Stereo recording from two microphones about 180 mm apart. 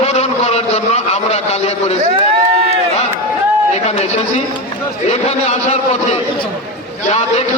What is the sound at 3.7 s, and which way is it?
A man's voice, 35° left (ahead or behind).